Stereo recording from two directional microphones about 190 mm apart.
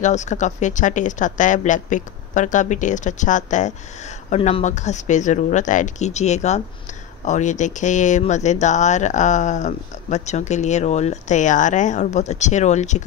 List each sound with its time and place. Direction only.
0.0 s speech: 40° left (ahead or behind)